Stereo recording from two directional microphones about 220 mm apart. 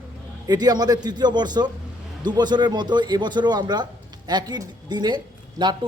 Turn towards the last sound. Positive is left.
turn(degrees=-20)  # may be behind; listen again after turning